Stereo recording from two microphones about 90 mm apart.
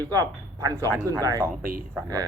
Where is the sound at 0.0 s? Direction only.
45° right (ahead or behind).